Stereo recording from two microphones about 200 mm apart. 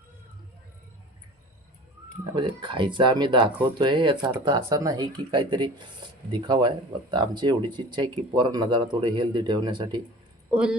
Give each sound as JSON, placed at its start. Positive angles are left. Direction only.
{"t": 2.3, "sound": "speech", "side_deg": -25}
{"t": 10.5, "sound": "speech", "side_deg": -5}